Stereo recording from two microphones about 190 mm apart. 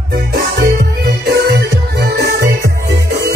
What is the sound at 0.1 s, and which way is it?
Music, 55° right (ahead or behind).